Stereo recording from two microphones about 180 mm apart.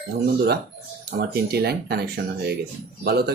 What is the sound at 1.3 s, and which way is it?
Speech, 60° right (ahead or behind).